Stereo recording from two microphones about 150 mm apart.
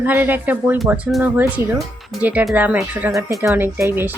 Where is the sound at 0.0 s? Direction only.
10° right (ahead or behind).